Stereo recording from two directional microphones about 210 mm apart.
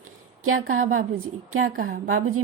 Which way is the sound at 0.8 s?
75° right (ahead or behind).